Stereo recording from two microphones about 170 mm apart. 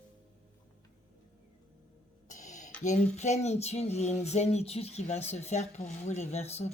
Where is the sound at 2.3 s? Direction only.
45° left (ahead or behind).